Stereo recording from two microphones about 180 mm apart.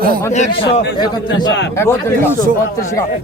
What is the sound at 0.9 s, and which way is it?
A man's voice, 25° left (ahead or behind).